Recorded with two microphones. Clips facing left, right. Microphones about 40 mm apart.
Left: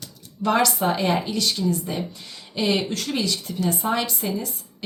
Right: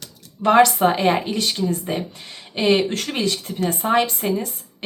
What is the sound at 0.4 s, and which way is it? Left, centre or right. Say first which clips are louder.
Speech: right 6 dB; right.